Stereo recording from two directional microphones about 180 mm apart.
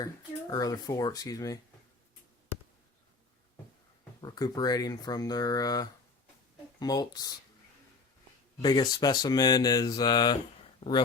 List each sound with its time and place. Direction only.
0.0 s speech: 20° left (ahead or behind)
4.2 s speech: 20° left (ahead or behind)
8.6 s speech: 20° left (ahead or behind)